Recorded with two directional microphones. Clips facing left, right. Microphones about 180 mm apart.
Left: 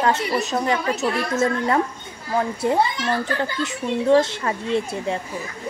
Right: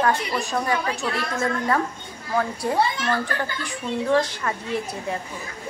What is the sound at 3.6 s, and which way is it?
A child's voice, 25° left (ahead or behind).